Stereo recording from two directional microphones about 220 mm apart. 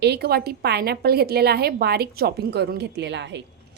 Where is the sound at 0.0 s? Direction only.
45° right (ahead or behind).